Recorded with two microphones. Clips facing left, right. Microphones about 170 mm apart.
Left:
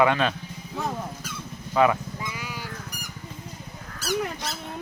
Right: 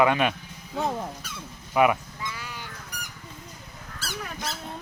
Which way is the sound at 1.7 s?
15° right (ahead or behind).